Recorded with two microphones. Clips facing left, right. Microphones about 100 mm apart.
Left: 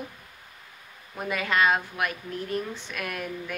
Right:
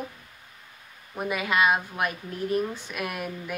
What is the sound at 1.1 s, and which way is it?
A woman's voice, 15° right (ahead or behind).